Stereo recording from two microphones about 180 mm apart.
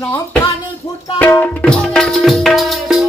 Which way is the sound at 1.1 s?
10° left (ahead or behind).